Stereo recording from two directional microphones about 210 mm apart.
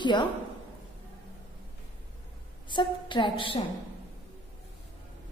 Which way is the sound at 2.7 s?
20° left (ahead or behind).